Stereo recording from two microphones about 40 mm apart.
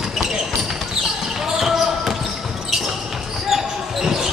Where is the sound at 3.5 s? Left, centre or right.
Centre.